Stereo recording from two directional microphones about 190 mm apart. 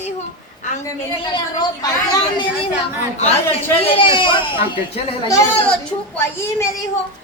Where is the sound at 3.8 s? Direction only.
30° left (ahead or behind).